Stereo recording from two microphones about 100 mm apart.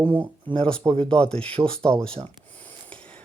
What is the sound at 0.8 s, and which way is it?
Speech, 30° right (ahead or behind).